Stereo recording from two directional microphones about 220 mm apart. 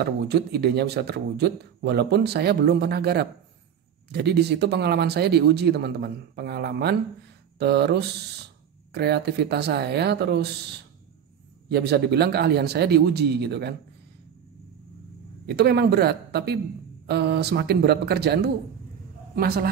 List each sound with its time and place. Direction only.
0.0 s speech: 50° right (ahead or behind)
11.7 s speech: 50° right (ahead or behind)
15.4 s speech: 50° right (ahead or behind)